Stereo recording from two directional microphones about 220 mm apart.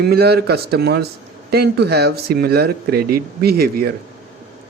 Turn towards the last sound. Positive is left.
turn(degrees=-45)  # may be behind; listen again after turning